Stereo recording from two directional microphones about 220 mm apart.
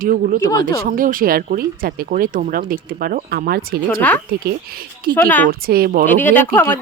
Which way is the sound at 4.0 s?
5° left (ahead or behind).